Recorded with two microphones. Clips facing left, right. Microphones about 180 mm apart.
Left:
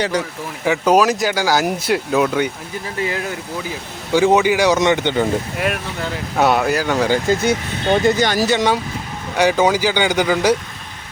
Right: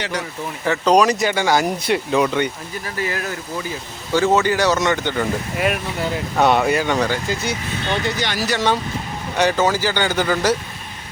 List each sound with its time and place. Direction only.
0.6 s speech: 10° left (ahead or behind)
3.0 s speech: 20° left (ahead or behind)
5.5 s speech: centre (ahead or behind)
7.9 s speech: 45° left (ahead or behind)
8.4 s speech: 15° left (ahead or behind)